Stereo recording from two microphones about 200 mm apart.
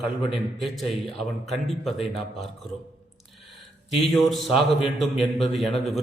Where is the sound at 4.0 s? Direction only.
Centre (ahead or behind).